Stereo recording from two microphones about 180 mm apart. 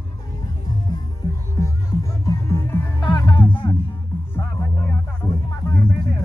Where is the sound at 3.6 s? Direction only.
25° left (ahead or behind).